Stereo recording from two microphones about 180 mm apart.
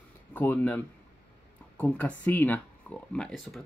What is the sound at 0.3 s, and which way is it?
Speech, 10° left (ahead or behind).